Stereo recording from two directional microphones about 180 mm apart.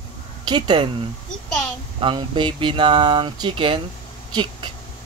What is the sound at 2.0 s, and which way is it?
Speech, 30° right (ahead or behind).